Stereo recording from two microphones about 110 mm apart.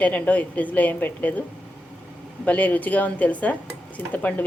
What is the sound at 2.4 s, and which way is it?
A woman's voice, 15° left (ahead or behind).